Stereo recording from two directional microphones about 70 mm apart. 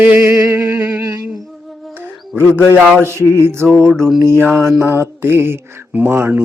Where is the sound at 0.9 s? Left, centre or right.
Right.